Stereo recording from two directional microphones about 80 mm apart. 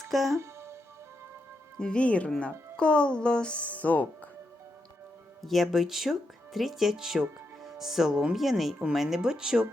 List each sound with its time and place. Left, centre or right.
0.3 s music: right
1.8 s speech: centre
5.4 s speech: centre